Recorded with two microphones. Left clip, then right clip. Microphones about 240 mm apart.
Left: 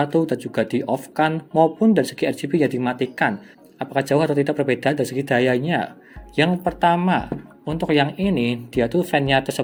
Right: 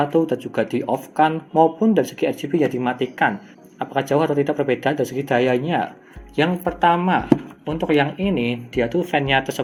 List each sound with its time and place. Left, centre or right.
0.0 s speech: left